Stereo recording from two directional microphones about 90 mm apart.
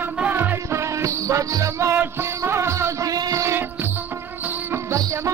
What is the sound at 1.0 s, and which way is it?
Music, 35° right (ahead or behind).